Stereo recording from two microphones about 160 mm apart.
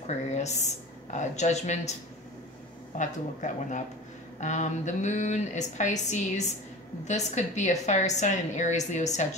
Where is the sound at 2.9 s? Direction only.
50° left (ahead or behind).